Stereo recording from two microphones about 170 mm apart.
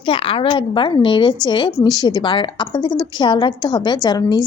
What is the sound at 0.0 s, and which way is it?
A woman's voice, 30° left (ahead or behind).